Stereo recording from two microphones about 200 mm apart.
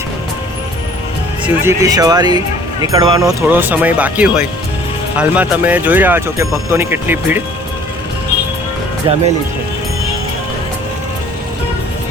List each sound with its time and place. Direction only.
1.5 s speech: 15° right (ahead or behind)
9.1 s speech: 25° right (ahead or behind)